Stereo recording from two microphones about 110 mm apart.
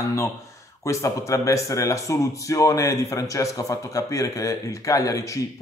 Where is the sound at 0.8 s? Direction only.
30° left (ahead or behind).